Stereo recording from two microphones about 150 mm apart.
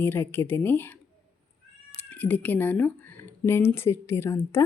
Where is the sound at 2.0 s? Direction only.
10° left (ahead or behind).